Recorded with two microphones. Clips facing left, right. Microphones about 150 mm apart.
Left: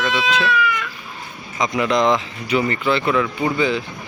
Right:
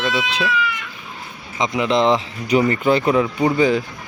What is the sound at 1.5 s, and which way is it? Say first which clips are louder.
Speech: right 1 dB; 25° right (ahead or behind).